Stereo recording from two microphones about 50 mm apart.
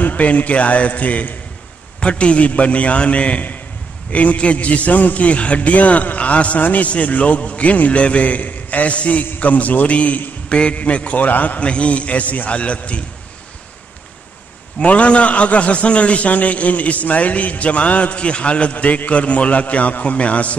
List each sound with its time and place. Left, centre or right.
0.0 s a man's voice: left
14.8 s a man's voice: left